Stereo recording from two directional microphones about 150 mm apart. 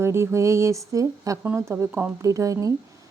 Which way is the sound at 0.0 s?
15° right (ahead or behind).